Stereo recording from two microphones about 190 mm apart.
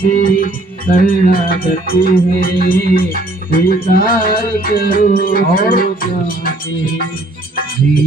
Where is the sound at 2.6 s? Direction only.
50° left (ahead or behind).